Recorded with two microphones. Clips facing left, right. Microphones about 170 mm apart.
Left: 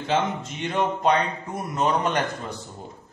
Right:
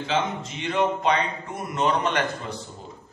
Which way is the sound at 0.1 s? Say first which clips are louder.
Left 2 dB; 50° left (ahead or behind).